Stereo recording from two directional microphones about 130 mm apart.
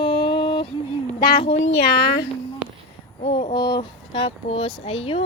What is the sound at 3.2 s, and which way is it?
Speech, 50° left (ahead or behind).